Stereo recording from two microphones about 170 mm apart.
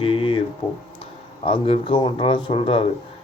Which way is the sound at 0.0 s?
30° left (ahead or behind).